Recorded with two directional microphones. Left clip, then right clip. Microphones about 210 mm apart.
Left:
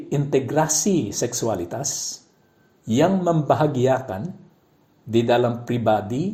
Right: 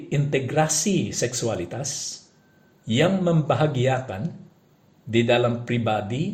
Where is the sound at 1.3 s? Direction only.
30° left (ahead or behind).